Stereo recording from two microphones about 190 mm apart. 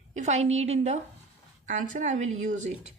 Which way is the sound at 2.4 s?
40° right (ahead or behind).